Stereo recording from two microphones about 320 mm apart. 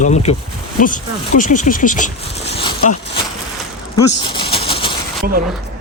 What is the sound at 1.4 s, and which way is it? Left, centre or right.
Speech, left.